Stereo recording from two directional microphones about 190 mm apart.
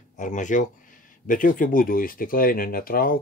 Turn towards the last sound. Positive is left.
turn(degrees=50)  # may be behind; listen again after turning